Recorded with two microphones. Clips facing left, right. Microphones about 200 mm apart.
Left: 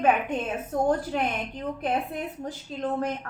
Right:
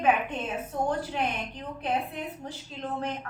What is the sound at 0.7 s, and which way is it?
Speech, 45° left (ahead or behind).